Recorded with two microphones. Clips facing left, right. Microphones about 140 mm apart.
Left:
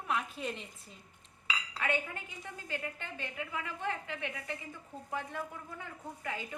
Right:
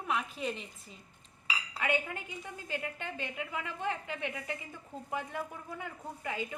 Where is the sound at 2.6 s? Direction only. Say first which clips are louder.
Right 2 dB; 15° right (ahead or behind).